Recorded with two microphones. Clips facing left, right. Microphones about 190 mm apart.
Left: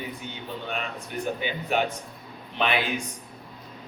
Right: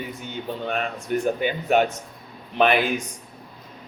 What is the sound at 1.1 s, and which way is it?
Speech, 55° right (ahead or behind).